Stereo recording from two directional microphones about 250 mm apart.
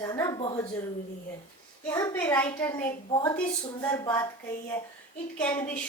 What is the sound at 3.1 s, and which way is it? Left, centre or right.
A woman's voice, centre.